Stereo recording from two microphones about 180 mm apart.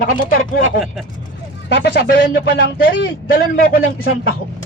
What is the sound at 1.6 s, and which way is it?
Speech, 70° left (ahead or behind).